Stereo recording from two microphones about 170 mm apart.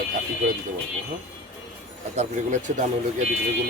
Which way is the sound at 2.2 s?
45° right (ahead or behind).